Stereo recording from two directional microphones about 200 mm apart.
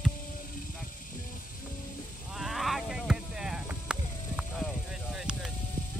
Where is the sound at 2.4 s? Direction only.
Centre (ahead or behind).